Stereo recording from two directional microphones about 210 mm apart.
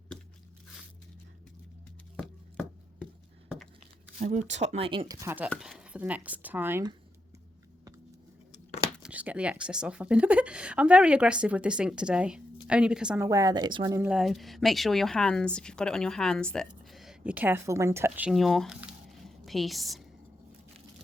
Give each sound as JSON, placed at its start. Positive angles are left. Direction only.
{"t": 2.1, "sound": "chopping", "side_deg": 5}
{"t": 4.2, "sound": "speech", "side_deg": -35}
{"t": 9.0, "sound": "speech", "side_deg": -5}
{"t": 13.2, "sound": "speech", "side_deg": -15}
{"t": 14.0, "sound": "speech", "side_deg": -5}
{"t": 18.3, "sound": "squish", "side_deg": 0}